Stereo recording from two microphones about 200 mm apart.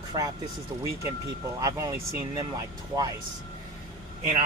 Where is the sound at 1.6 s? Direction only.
15° right (ahead or behind).